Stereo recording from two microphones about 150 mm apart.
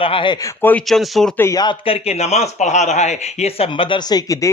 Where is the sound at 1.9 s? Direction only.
45° left (ahead or behind).